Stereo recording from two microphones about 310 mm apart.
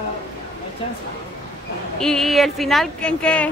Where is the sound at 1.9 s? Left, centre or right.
Centre.